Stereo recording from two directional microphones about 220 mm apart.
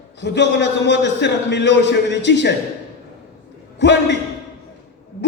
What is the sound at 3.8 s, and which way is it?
Speech, 50° left (ahead or behind).